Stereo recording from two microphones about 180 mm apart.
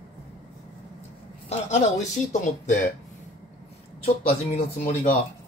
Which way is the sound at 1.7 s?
40° left (ahead or behind).